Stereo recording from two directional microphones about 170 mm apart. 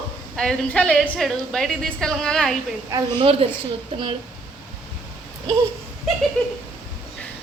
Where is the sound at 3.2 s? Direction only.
35° right (ahead or behind).